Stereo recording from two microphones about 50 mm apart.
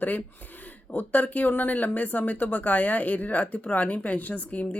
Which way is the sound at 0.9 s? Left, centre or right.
Left.